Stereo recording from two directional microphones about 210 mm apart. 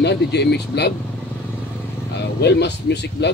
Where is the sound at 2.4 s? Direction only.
55° left (ahead or behind).